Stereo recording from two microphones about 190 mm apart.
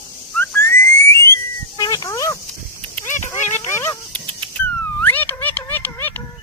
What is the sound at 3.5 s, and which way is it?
Dog, 10° left (ahead or behind).